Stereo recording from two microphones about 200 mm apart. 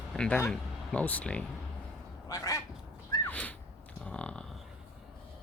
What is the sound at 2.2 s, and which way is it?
Quack, 15° left (ahead or behind).